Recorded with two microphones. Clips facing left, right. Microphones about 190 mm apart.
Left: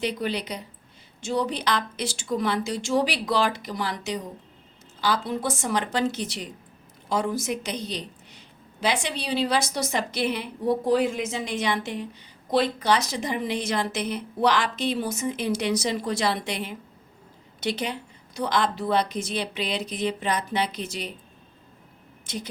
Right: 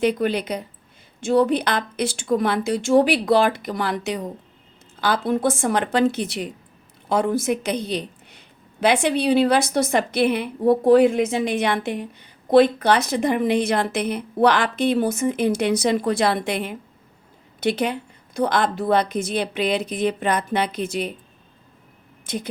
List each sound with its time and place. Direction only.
0.0 s a woman's voice: 50° right (ahead or behind)
22.3 s a woman's voice: 55° right (ahead or behind)